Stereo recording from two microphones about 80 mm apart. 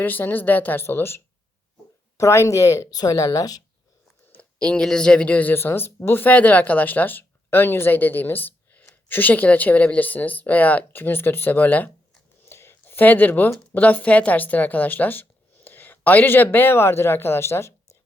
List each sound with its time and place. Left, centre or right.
0.0 s speech: left
2.9 s speech: left
4.3 s a woman's voice: centre
12.5 s a sound: left
13.7 s a woman's voice: left